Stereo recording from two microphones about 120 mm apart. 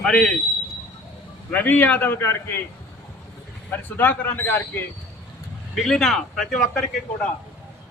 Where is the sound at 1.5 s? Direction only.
15° left (ahead or behind).